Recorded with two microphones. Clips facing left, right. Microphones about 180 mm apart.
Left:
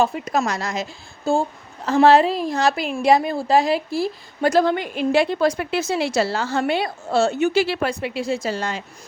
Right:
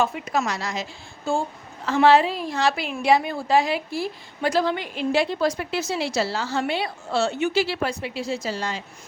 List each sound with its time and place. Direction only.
0.0 s a woman's voice: 35° left (ahead or behind); by 8.8 s 55° left (ahead or behind)